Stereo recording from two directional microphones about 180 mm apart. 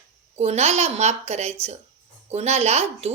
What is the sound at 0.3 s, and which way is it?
A woman's voice, 35° right (ahead or behind).